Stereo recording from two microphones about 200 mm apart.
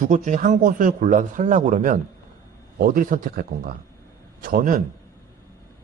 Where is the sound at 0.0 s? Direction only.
40° right (ahead or behind).